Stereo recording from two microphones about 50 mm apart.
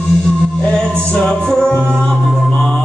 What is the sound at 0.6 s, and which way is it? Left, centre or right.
Music, centre.